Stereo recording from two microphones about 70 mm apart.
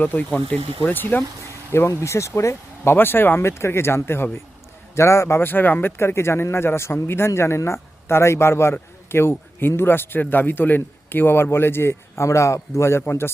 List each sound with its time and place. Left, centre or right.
0.0 s speech: left
1.7 s speech: left